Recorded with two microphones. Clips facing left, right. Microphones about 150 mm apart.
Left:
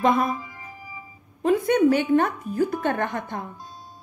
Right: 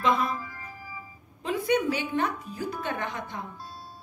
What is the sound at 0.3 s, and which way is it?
Music, 15° left (ahead or behind).